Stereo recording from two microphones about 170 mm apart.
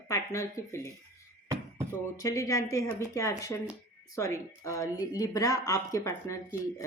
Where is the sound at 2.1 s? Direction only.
20° left (ahead or behind).